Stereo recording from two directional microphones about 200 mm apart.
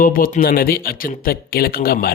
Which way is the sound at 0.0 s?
45° left (ahead or behind).